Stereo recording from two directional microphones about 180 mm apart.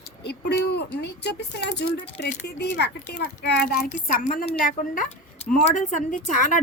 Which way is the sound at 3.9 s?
45° left (ahead or behind).